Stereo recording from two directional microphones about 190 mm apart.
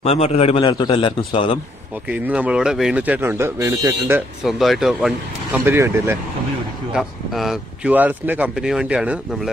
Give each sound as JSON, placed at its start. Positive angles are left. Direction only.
{"t": 0.0, "sound": "a man's voice", "side_deg": 30}
{"t": 2.0, "sound": "speech", "side_deg": -5}
{"t": 4.4, "sound": "speech", "side_deg": 0}
{"t": 6.9, "sound": "speech", "side_deg": 0}